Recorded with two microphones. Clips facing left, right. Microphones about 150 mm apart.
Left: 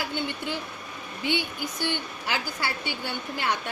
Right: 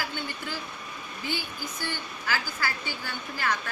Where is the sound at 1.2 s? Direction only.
80° left.